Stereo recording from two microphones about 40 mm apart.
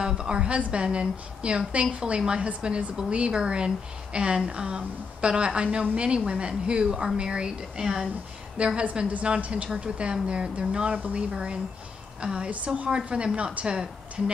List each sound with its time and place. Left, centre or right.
0.0 s a woman's voice: centre
0.6 s a woman's voice: right
8.6 s a woman's voice: right